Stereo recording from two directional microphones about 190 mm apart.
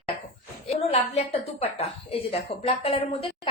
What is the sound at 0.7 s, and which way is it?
A woman's voice, 30° left (ahead or behind).